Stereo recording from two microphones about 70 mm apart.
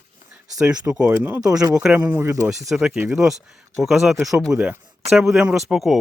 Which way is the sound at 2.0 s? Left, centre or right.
Right.